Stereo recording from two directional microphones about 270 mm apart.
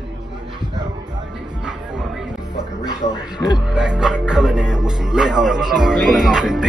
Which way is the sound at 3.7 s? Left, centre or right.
Centre.